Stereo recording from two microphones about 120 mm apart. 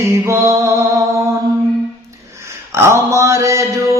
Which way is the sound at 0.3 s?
25° right (ahead or behind).